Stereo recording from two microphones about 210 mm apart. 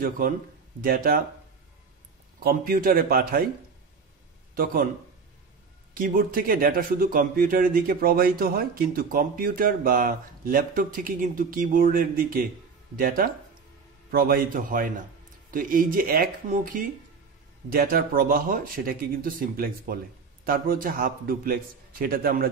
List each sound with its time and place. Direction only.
0.7 s a man's voice: 45° right (ahead or behind)
2.4 s a man's voice: 45° right (ahead or behind)
5.9 s a man's voice: 45° right (ahead or behind)